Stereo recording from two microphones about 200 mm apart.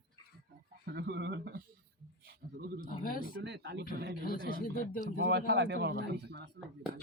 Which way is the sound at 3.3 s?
60° right (ahead or behind).